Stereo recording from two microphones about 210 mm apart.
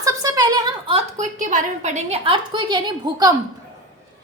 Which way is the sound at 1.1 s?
35° right (ahead or behind).